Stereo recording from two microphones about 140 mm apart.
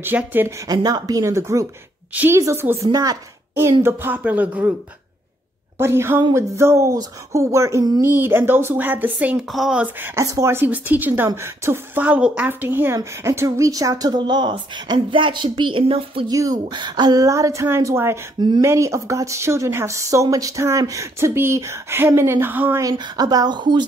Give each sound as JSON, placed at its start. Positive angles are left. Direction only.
{"t": 0.0, "sound": "a woman's voice", "side_deg": -15}
{"t": 0.7, "sound": "speech", "side_deg": -30}
{"t": 3.8, "sound": "a woman's voice", "side_deg": -15}
{"t": 5.8, "sound": "a woman's voice", "side_deg": -20}
{"t": 16.3, "sound": "speech", "side_deg": -25}